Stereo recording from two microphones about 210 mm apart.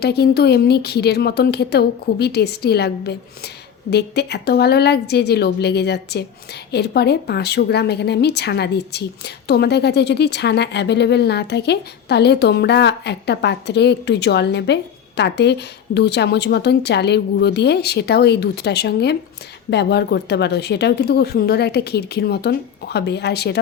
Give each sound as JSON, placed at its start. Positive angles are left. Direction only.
{"t": 0.0, "sound": "speech", "side_deg": 50}